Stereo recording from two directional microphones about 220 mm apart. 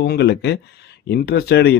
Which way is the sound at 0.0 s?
45° left (ahead or behind).